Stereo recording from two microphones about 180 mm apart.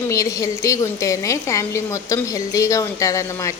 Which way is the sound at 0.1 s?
20° left (ahead or behind).